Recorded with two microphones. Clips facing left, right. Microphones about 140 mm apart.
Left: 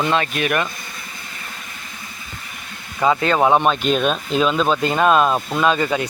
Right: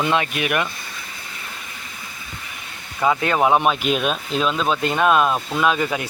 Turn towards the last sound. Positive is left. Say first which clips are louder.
# left 2 dB
turn(degrees=0)  # may be behind; listen again after turning